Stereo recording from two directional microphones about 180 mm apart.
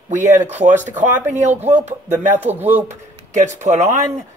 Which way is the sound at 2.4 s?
10° right (ahead or behind).